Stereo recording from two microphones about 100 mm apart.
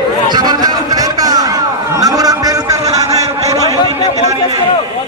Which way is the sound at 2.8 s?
90° right.